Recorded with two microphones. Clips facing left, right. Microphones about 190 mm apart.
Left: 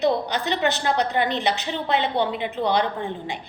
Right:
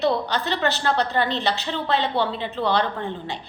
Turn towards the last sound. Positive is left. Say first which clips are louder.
# left 1 dB
turn(degrees=15)  # may be behind; listen again after turning